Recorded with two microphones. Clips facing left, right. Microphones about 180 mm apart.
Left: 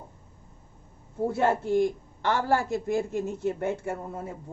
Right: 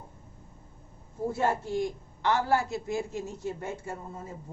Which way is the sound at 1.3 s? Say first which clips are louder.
Left 4 dB; 60° left (ahead or behind).